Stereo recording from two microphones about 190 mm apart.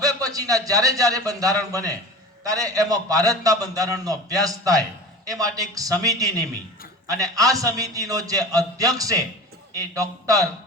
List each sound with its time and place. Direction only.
0.0 s a man's voice: 20° right (ahead or behind)